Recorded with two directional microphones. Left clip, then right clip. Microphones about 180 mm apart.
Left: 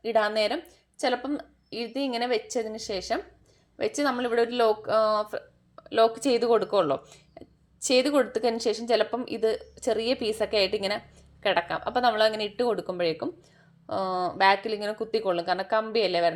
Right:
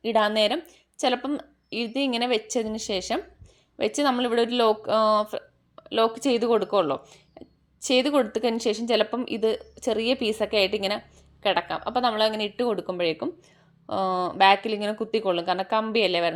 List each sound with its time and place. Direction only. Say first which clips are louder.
0.0 s a woman's voice: right 2 dB; 25° right (ahead or behind)